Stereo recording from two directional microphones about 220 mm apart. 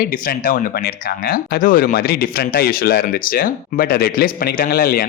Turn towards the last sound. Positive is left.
turn(degrees=45)  # may be behind; listen again after turning